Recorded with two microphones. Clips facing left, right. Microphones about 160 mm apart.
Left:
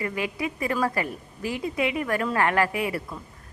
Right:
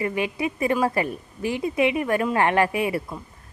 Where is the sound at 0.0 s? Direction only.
25° right (ahead or behind).